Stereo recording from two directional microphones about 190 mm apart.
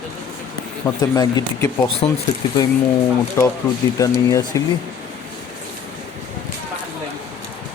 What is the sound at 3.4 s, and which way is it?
Speech, 15° left (ahead or behind).